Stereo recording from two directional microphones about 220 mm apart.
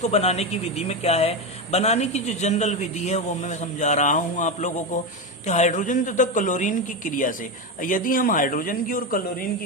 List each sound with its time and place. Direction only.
0.0 s speech: 30° left (ahead or behind)